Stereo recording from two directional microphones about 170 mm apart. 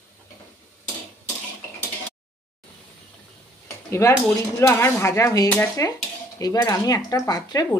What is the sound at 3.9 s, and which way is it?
Speech, 15° left (ahead or behind).